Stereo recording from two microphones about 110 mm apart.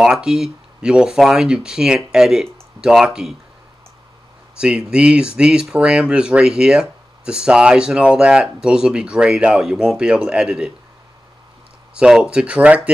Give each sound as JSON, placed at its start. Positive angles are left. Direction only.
{"t": 0.0, "sound": "speech", "side_deg": -5}
{"t": 4.6, "sound": "speech", "side_deg": -10}
{"t": 11.9, "sound": "speech", "side_deg": -5}